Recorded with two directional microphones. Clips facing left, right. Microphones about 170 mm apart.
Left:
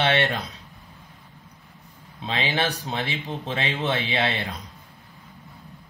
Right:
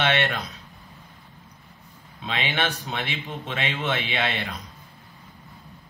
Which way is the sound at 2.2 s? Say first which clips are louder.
Left 2 dB; 35° left (ahead or behind).